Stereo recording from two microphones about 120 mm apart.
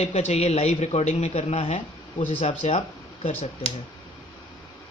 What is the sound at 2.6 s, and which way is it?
Speech, 80° left.